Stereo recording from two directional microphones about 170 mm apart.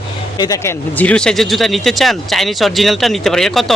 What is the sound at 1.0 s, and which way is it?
Speech, 5° left (ahead or behind).